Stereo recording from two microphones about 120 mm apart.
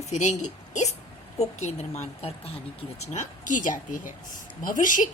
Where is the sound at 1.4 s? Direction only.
65° left (ahead or behind).